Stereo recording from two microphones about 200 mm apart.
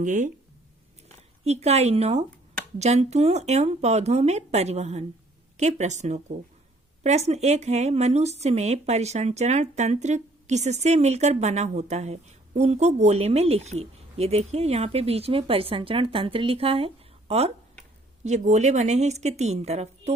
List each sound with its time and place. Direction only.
0.0 s speech: 40° right (ahead or behind)